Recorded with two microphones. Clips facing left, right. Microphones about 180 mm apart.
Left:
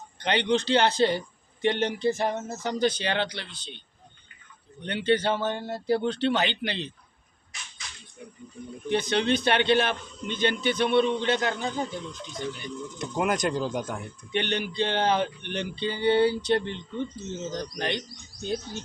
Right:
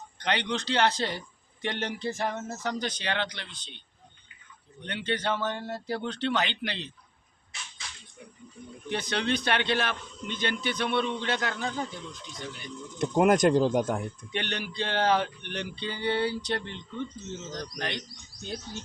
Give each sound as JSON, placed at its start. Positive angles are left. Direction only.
{"t": 0.2, "sound": "a man's voice", "side_deg": 30}
{"t": 4.9, "sound": "speech", "side_deg": 30}
{"t": 8.9, "sound": "a man's voice", "side_deg": 25}
{"t": 13.0, "sound": "speech", "side_deg": -50}
{"t": 14.3, "sound": "a man's voice", "side_deg": 25}